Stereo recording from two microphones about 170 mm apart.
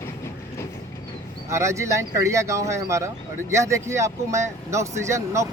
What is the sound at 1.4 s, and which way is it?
Speech, 15° right (ahead or behind).